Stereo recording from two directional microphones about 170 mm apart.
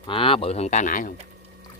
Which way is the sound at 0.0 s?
30° left (ahead or behind).